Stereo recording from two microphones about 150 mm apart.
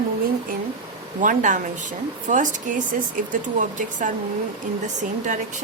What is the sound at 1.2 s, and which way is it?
Speech, 60° right (ahead or behind).